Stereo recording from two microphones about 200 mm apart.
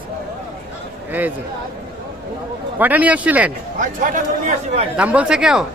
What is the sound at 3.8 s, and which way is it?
Speech, 40° right (ahead or behind).